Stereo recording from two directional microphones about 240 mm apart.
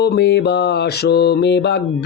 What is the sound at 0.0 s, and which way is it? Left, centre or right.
Mantra, left.